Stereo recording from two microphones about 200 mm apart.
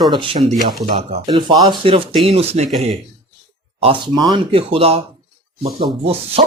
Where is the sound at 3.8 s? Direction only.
25° right (ahead or behind).